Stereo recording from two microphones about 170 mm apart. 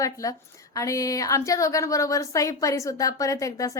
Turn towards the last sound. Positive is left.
turn(degrees=20)  # may be behind; listen again after turning